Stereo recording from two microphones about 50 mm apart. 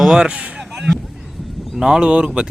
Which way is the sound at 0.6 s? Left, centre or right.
Centre.